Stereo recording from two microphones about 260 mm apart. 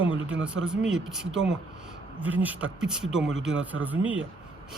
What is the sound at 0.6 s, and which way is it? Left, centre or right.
Speech, centre.